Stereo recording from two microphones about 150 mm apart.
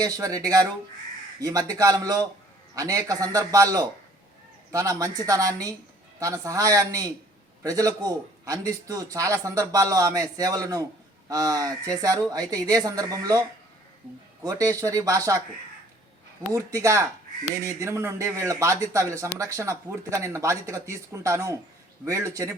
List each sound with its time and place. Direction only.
0.0 s speech: 25° right (ahead or behind)
14.4 s speech: 20° right (ahead or behind)
16.5 s speech: 20° right (ahead or behind)